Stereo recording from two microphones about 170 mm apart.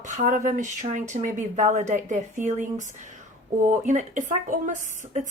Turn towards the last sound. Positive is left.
turn(degrees=-50)  # may be behind; listen again after turning